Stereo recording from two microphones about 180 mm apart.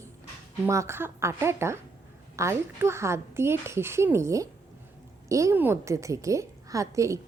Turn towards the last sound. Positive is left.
turn(degrees=-15)  # may be behind; listen again after turning